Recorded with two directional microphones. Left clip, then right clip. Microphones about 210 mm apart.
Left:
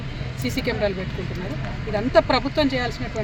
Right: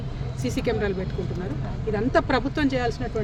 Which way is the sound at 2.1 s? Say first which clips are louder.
Left 6 dB; 20° right (ahead or behind).